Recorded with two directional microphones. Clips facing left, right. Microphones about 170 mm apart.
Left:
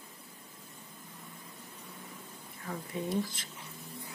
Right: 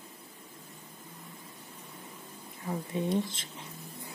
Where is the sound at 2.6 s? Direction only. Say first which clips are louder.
Right 4 dB; 20° right (ahead or behind).